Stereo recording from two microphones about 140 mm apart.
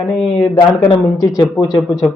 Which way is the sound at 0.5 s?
35° left (ahead or behind).